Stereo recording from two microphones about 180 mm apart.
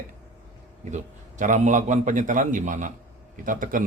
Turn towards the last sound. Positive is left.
turn(degrees=-50)  # may be behind; listen again after turning